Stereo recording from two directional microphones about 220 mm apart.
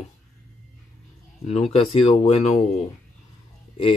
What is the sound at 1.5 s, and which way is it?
Speech, 25° left (ahead or behind).